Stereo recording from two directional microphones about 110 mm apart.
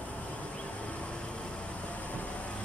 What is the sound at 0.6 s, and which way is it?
Vehicle, 10° left (ahead or behind).